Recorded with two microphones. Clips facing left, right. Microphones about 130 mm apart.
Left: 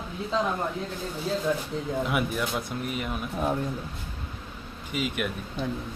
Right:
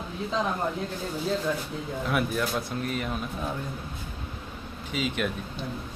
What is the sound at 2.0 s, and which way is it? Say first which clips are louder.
Speech: right 1 dB; 15° left (ahead or behind).